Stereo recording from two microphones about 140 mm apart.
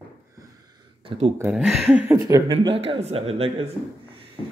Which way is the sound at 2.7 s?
45° right (ahead or behind).